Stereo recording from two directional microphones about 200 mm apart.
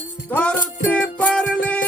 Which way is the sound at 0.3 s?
5° left (ahead or behind).